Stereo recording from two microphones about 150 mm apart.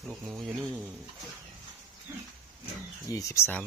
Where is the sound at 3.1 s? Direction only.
20° left (ahead or behind).